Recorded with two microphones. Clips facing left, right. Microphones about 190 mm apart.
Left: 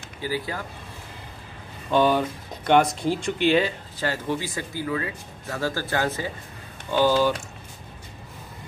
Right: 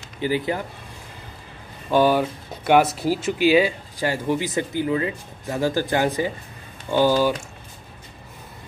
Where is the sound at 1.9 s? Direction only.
5° right (ahead or behind).